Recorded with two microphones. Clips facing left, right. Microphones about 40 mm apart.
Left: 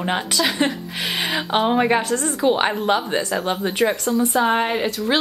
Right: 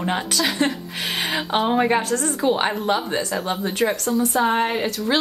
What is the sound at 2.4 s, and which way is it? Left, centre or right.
Speech, left.